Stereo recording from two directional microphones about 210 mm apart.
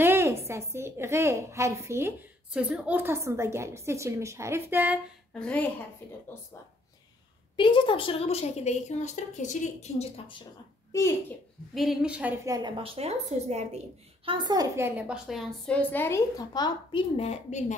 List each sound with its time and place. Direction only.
0.0 s a woman's voice: 10° right (ahead or behind)
5.3 s a woman's voice: 5° left (ahead or behind)
7.5 s a woman's voice: 25° left (ahead or behind)
10.9 s a child's voice: 15° left (ahead or behind)
11.7 s a woman's voice: centre (ahead or behind); by 17.7 s 35° left (ahead or behind)